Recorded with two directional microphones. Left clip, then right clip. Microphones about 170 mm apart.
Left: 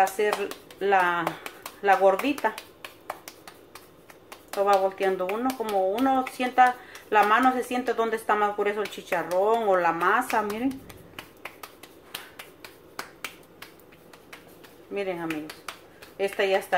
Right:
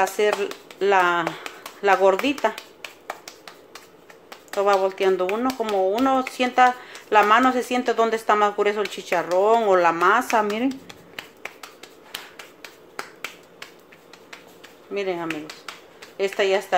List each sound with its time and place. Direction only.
0.2 s speech: 50° right (ahead or behind)
4.6 s speech: 45° right (ahead or behind)
15.0 s speech: 40° right (ahead or behind)